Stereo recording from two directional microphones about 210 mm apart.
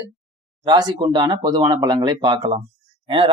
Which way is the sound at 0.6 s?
20° right (ahead or behind).